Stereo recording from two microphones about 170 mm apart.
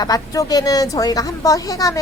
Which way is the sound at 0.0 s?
20° left (ahead or behind).